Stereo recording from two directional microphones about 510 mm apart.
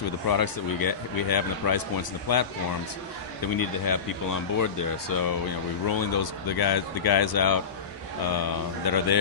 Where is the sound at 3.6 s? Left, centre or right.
Left.